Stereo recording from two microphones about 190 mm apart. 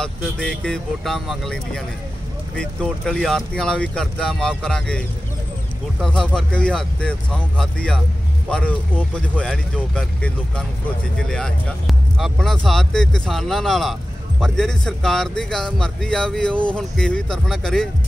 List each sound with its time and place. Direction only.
0.0 s speech: 5° left (ahead or behind)